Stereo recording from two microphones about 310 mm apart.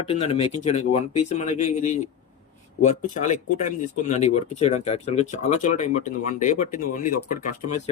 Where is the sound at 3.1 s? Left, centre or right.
Left.